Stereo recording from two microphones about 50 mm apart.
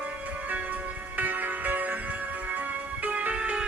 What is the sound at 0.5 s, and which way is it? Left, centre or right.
Music, right.